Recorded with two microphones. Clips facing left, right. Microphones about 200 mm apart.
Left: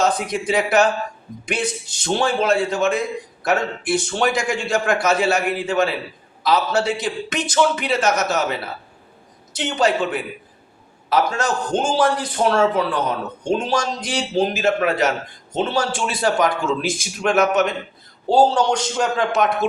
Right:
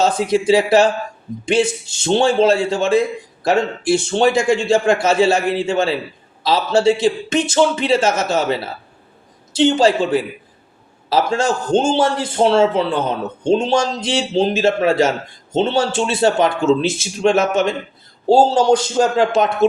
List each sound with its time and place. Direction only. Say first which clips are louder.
0.0 s a man's voice: right 5 dB; 30° right (ahead or behind)